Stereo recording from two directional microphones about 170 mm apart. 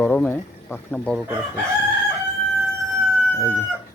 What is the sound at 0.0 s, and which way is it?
Speech, 10° left (ahead or behind).